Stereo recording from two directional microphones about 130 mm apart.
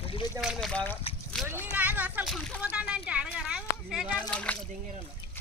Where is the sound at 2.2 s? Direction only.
5° left (ahead or behind).